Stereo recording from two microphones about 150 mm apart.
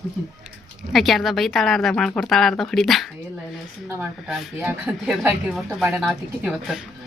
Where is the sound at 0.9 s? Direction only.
Centre (ahead or behind).